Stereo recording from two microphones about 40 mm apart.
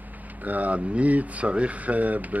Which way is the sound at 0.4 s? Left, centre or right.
Right.